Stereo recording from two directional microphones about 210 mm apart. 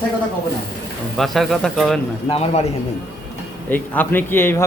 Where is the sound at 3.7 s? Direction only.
10° left (ahead or behind).